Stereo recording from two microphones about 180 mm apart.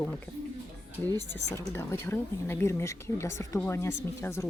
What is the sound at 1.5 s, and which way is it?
Speech, 15° left (ahead or behind).